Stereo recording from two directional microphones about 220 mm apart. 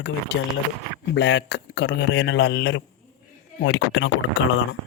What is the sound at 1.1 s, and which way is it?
Speech, 50° left (ahead or behind).